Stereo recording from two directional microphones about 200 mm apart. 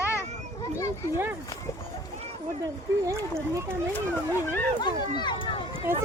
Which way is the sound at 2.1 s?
35° right (ahead or behind).